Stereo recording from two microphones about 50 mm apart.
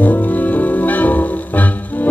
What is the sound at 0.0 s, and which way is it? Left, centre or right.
Music, left.